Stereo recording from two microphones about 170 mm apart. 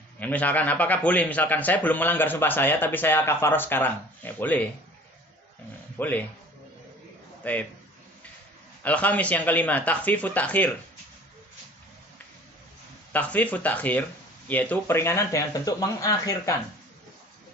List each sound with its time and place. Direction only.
0.2 s a man's voice: 10° left (ahead or behind)
5.9 s speech: 10° left (ahead or behind)
7.4 s a man's voice: 10° left (ahead or behind)
8.8 s a man's voice: 10° left (ahead or behind)
13.1 s a man's voice: 10° left (ahead or behind)